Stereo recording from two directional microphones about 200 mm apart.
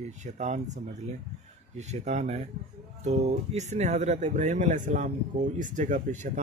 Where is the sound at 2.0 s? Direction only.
35° right (ahead or behind).